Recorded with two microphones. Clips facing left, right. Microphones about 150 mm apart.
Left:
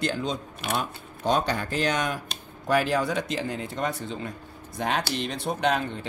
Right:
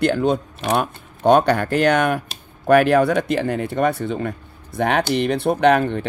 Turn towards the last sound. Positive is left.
turn(degrees=-65)  # may be behind; listen again after turning